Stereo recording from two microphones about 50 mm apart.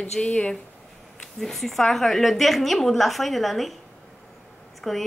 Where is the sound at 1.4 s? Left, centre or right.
Centre.